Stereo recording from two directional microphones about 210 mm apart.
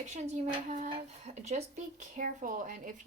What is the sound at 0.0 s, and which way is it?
Speech, 35° right (ahead or behind).